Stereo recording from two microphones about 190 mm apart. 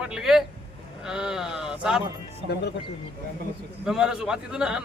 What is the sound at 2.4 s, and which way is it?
Speech, 35° right (ahead or behind).